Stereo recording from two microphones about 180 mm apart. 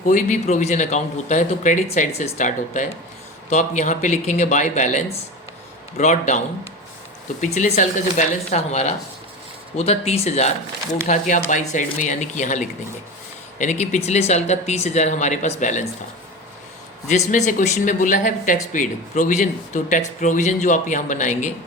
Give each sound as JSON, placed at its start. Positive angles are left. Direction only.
{"t": 0.0, "sound": "speech", "side_deg": 45}
{"t": 7.4, "sound": "speech", "side_deg": 40}
{"t": 17.1, "sound": "speech", "side_deg": 40}